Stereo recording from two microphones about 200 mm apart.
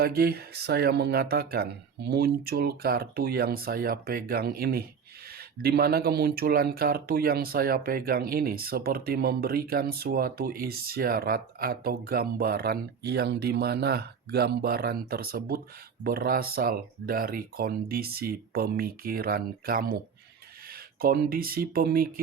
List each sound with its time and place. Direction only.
0.0 s speech: 50° right (ahead or behind)